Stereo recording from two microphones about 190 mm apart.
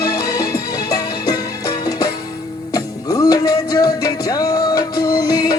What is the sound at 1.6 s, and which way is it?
Music, 20° left (ahead or behind).